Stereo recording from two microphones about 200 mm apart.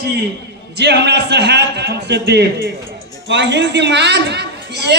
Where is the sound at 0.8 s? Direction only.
55° right (ahead or behind).